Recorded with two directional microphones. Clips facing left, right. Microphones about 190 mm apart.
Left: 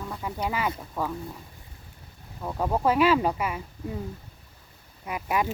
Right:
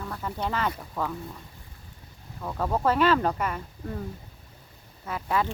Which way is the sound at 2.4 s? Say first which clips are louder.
Left 1 dB; 15° left (ahead or behind).